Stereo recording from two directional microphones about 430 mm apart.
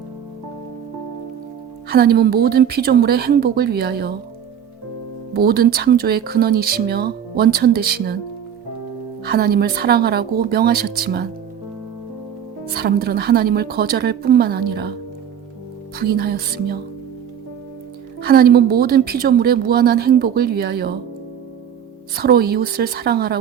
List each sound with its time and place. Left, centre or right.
1.9 s a woman's voice: right
5.3 s a woman's voice: right
9.2 s a woman's voice: right
12.7 s a woman's voice: right
16.0 s a woman's voice: right
18.2 s a woman's voice: right
22.1 s a woman's voice: right